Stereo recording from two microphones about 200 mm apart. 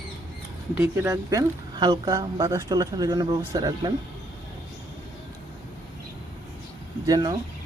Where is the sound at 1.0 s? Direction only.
15° right (ahead or behind).